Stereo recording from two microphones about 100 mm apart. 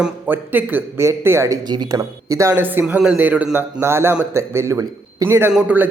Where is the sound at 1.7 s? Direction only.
40° right (ahead or behind).